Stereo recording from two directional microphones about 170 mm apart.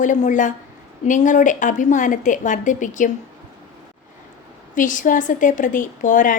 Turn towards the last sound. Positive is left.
turn(degrees=50)  # may be behind; listen again after turning